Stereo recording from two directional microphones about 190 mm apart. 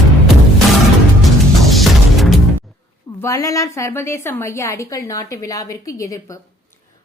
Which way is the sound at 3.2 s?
15° left (ahead or behind).